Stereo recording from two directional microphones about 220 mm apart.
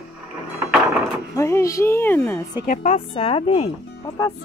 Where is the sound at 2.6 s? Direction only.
30° left (ahead or behind).